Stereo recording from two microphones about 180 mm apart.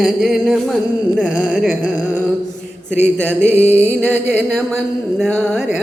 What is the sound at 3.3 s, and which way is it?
Music, 10° right (ahead or behind).